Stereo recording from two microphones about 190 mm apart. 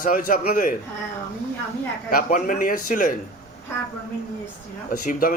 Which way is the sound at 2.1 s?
45° left (ahead or behind).